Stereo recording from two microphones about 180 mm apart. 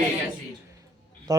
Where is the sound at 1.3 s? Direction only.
20° right (ahead or behind).